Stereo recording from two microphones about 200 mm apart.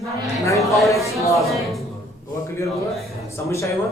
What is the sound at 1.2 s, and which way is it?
Speech, 15° left (ahead or behind).